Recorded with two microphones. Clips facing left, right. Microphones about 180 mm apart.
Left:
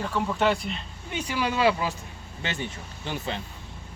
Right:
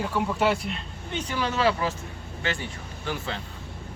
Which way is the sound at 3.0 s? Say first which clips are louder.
Even; 20° left (ahead or behind).